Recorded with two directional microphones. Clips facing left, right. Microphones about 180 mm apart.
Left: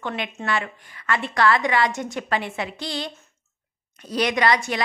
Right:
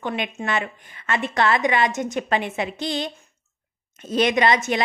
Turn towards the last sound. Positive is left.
turn(degrees=-20)  # may be behind; listen again after turning